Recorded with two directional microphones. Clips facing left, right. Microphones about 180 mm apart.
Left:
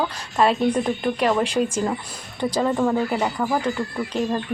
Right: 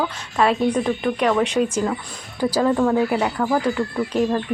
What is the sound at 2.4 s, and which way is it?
Speech, 5° right (ahead or behind).